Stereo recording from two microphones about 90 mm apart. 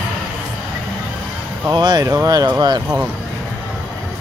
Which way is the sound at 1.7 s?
50° right (ahead or behind).